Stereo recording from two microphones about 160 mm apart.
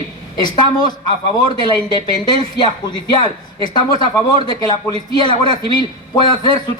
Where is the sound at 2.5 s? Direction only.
25° left (ahead or behind).